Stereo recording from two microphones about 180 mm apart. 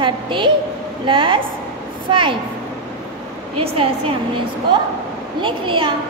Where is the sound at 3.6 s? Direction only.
30° right (ahead or behind).